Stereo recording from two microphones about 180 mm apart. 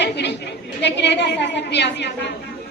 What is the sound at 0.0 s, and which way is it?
A woman's voice, 75° left (ahead or behind).